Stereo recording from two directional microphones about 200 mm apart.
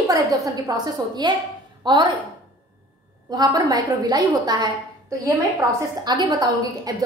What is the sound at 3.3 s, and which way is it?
A woman's voice, 20° right (ahead or behind).